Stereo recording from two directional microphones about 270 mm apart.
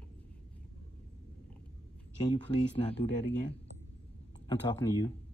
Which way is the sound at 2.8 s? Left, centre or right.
Left.